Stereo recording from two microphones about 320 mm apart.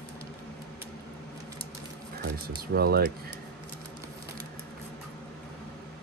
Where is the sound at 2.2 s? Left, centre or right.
Right.